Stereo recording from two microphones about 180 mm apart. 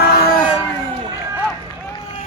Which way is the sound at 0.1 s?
55° left (ahead or behind).